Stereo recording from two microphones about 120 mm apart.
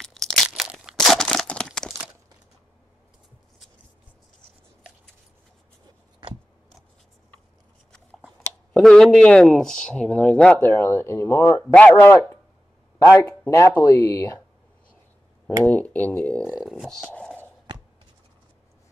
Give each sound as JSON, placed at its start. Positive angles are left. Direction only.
{"t": 0.0, "sound": "a sound", "side_deg": 5}
{"t": 8.7, "sound": "speech", "side_deg": 5}
{"t": 10.7, "sound": "speech", "side_deg": 20}
{"t": 11.6, "sound": "speech", "side_deg": 10}
{"t": 13.5, "sound": "speech", "side_deg": 25}
{"t": 15.6, "sound": "speech", "side_deg": 15}
{"t": 16.5, "sound": "speech", "side_deg": -5}
{"t": 17.1, "sound": "a sound", "side_deg": 10}